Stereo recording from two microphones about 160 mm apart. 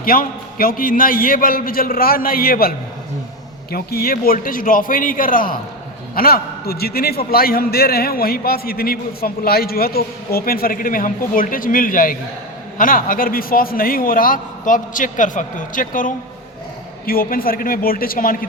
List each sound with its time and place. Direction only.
0.0 s a man's voice: 65° left (ahead or behind)